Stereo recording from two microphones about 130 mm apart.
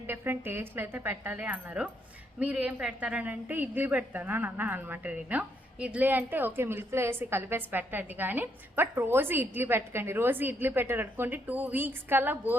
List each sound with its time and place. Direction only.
0.1 s a woman's voice: 15° right (ahead or behind)